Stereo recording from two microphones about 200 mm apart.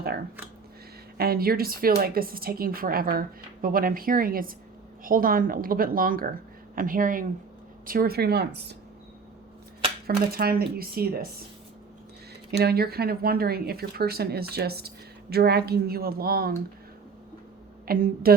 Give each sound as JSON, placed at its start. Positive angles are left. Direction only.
{"t": 1.2, "sound": "a woman's voice", "side_deg": -50}
{"t": 10.1, "sound": "a woman's voice", "side_deg": -50}
{"t": 12.5, "sound": "a woman's voice", "side_deg": -55}
{"t": 17.8, "sound": "a woman's voice", "side_deg": -45}